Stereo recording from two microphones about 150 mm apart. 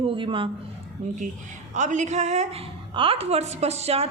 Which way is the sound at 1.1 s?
55° right (ahead or behind).